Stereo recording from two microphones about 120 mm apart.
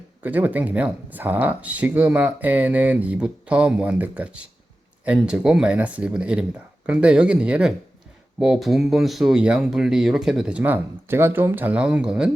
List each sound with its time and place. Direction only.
0.2 s speech: 15° right (ahead or behind)
10.6 s speech: 20° right (ahead or behind)